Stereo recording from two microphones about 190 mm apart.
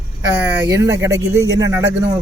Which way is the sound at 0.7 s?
15° right (ahead or behind).